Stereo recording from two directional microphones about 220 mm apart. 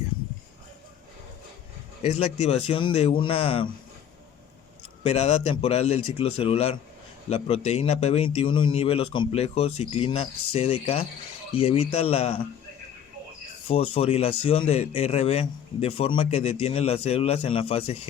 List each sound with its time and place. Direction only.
2.0 s speech: 30° left (ahead or behind)
5.0 s speech: 25° left (ahead or behind)
13.7 s speech: 25° left (ahead or behind)